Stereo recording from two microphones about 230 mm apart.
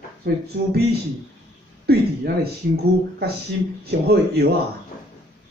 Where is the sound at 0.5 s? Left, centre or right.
Right.